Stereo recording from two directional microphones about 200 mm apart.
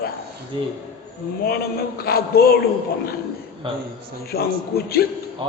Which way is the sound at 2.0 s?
50° left (ahead or behind).